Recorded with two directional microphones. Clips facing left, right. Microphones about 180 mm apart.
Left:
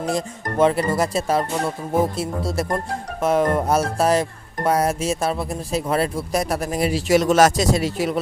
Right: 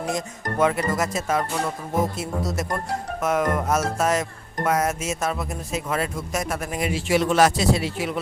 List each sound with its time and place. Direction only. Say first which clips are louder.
0.1 s speech: left 3 dB; 30° left (ahead or behind)